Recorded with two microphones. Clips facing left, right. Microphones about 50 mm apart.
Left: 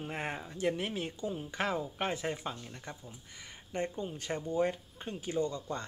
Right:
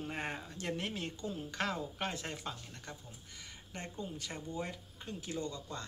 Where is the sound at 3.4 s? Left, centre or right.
Left.